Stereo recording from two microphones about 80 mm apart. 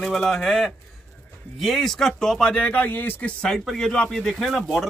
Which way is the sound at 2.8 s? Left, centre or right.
Left.